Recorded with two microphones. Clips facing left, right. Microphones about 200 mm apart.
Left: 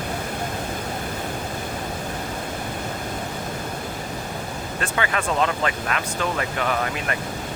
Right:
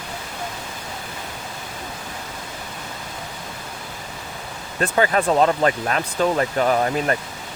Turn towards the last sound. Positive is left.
turn(degrees=-35)  # may be behind; listen again after turning